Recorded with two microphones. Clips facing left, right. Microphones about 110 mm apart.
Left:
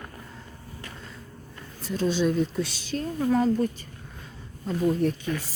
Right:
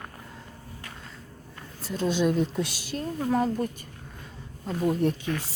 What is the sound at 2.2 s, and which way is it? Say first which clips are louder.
A woman's voice: even; 10° right (ahead or behind).